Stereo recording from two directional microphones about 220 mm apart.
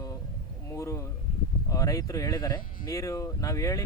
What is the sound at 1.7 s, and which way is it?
Speech, 15° left (ahead or behind).